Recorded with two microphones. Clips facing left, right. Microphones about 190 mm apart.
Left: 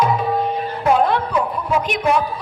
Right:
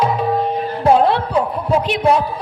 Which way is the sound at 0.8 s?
30° right (ahead or behind).